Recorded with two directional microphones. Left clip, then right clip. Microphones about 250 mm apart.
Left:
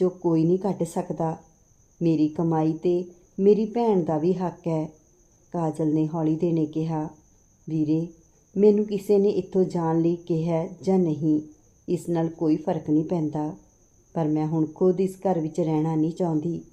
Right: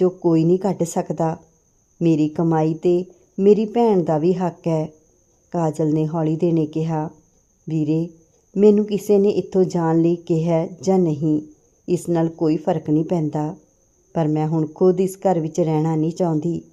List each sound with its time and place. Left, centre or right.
0.0 s speech: right